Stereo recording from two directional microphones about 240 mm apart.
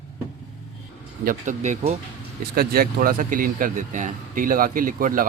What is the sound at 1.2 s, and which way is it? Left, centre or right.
Speech, right.